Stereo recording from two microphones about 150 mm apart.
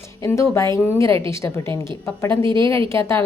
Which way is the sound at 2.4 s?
35° right (ahead or behind).